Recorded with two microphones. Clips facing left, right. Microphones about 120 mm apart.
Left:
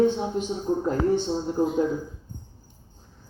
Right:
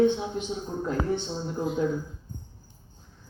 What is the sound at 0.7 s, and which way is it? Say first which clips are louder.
A man's voice: left 6 dB; 30° left (ahead or behind).